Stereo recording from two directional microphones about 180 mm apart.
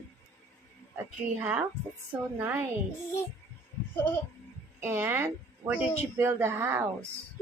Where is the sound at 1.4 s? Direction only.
10° right (ahead or behind).